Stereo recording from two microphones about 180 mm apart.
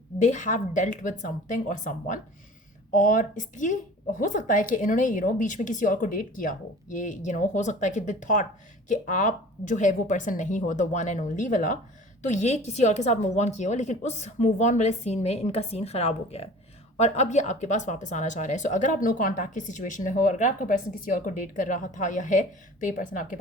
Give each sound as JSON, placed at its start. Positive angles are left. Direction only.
{"t": 0.2, "sound": "a woman's voice", "side_deg": 40}